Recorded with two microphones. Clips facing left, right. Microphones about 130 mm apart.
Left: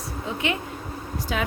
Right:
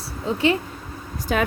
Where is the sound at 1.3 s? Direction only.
50° right (ahead or behind).